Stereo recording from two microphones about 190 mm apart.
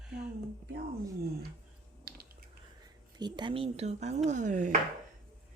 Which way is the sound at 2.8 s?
20° right (ahead or behind).